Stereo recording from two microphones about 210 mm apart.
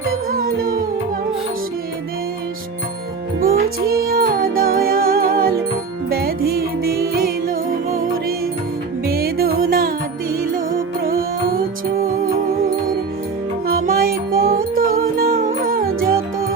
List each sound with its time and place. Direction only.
0.3 s music: 45° right (ahead or behind)
3.4 s music: 45° right (ahead or behind)
9.0 s music: 45° right (ahead or behind)
13.7 s music: 45° right (ahead or behind)